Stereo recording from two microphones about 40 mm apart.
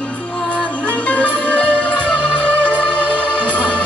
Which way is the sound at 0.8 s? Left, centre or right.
Left.